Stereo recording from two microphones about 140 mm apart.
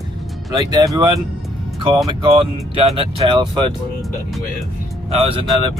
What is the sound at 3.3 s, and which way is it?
Speech, 30° right (ahead or behind).